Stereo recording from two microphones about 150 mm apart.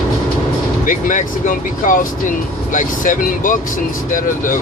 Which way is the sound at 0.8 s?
60° left (ahead or behind).